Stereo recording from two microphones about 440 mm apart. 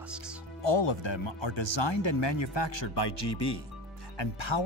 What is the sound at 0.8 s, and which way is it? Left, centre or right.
Speech, left.